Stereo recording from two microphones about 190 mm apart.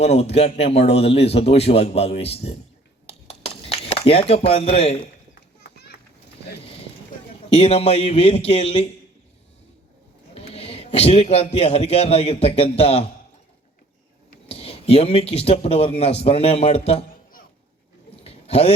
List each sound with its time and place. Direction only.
0.0 s a man's voice: 35° left (ahead or behind)
3.1 s a sound: 30° left (ahead or behind)
7.5 s a man's voice: 30° left (ahead or behind)
10.3 s a man's voice: 30° left (ahead or behind)
14.4 s a man's voice: 30° left (ahead or behind)
18.2 s a sound: 30° left (ahead or behind)